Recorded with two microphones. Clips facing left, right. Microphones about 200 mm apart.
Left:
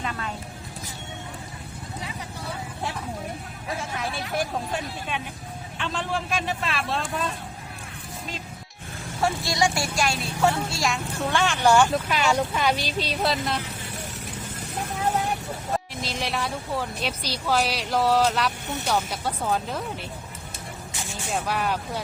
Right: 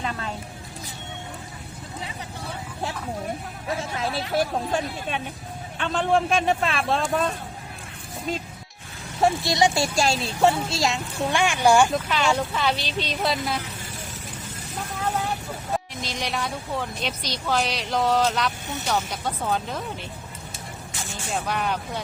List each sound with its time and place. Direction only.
0.0 s music: 30° right (ahead or behind)
3.8 s speech: 25° right (ahead or behind)
5.8 s speech: 45° right (ahead or behind)
9.2 s speech: 20° right (ahead or behind)
11.9 s speech: 10° left (ahead or behind)
16.0 s speech: centre (ahead or behind)
21.2 s speech: centre (ahead or behind)